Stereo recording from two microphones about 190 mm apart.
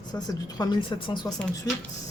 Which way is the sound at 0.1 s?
20° left (ahead or behind).